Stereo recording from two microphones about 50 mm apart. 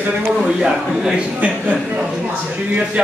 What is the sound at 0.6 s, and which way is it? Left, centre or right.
Speech, centre.